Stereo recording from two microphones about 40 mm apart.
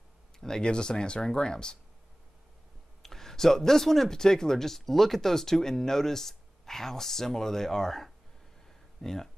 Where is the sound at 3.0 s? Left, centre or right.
Centre.